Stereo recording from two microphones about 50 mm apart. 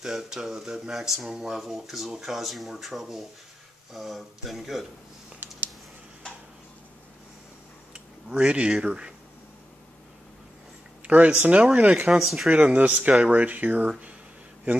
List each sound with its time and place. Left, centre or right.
0.0 s speech: centre
7.9 s speech: right
11.1 s speech: right
12.1 s speech: centre
12.4 s speech: right